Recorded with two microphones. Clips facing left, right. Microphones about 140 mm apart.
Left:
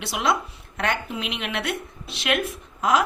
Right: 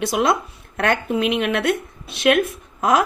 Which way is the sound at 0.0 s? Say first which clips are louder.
Right 5 dB; 45° right (ahead or behind).